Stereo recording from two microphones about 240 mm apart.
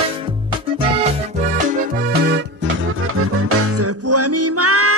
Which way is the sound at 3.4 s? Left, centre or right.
Right.